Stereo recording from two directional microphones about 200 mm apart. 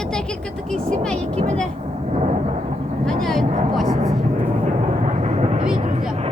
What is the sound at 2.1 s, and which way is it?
Thunder, 35° right (ahead or behind).